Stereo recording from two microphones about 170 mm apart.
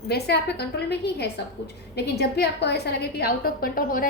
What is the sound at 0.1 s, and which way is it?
A woman's voice, 75° left (ahead or behind).